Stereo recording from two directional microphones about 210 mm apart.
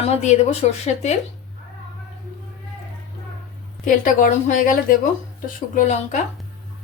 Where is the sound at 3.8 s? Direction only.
40° left (ahead or behind).